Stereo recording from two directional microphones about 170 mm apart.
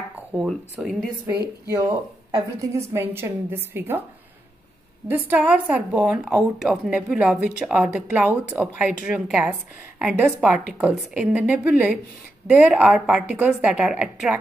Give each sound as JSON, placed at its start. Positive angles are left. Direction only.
{"t": 0.5, "sound": "speech", "side_deg": 0}
{"t": 1.9, "sound": "a woman's voice", "side_deg": -20}
{"t": 5.3, "sound": "a woman's voice", "side_deg": -10}